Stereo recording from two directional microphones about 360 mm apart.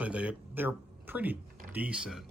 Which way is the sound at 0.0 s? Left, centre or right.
Centre.